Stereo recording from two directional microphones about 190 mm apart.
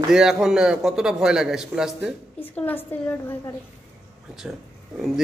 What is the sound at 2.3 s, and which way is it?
A woman's voice, 10° left (ahead or behind).